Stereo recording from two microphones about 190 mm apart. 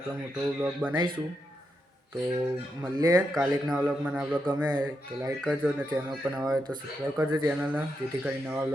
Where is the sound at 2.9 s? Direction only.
20° right (ahead or behind).